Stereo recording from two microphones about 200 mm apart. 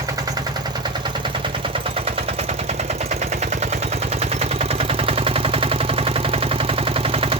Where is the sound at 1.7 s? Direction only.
30° right (ahead or behind).